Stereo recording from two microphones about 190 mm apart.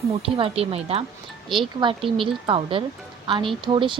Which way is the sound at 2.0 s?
Centre (ahead or behind).